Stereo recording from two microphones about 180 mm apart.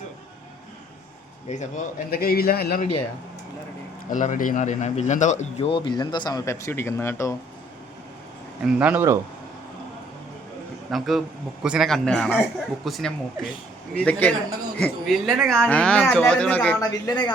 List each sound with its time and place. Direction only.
1.5 s a man's voice: 40° left (ahead or behind); by 2.8 s 60° left (ahead or behind)
4.1 s speech: 45° left (ahead or behind); by 7.3 s 15° left (ahead or behind)
8.6 s speech: 10° right (ahead or behind)
10.9 s a man's voice: centre (ahead or behind)
16.8 s speech: 25° left (ahead or behind)